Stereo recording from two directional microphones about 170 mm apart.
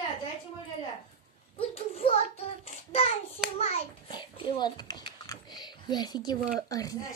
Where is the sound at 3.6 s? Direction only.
35° left (ahead or behind).